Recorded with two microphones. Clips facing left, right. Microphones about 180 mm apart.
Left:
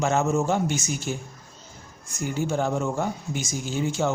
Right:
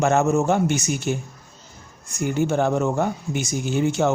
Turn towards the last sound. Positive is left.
turn(degrees=-65)  # may be behind; listen again after turning